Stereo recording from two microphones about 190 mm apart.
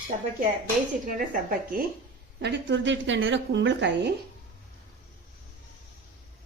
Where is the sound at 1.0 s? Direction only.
45° right (ahead or behind).